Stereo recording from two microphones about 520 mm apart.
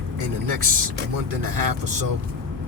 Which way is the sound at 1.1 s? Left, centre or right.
Right.